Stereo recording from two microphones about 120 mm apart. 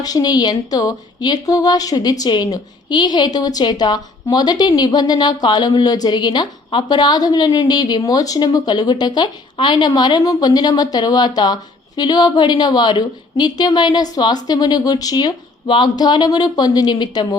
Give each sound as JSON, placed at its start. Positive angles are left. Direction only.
{"t": 0.0, "sound": "a woman's voice", "side_deg": 35}